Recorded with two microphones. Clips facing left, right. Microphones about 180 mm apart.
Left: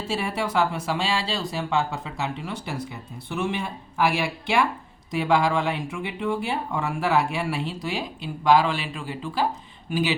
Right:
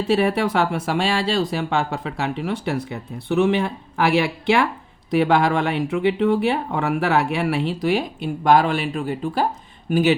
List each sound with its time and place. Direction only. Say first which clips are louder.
0.1 s speech: right 7 dB; 60° right (ahead or behind)